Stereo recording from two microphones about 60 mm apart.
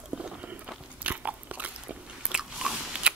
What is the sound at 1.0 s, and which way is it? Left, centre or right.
Biting, right.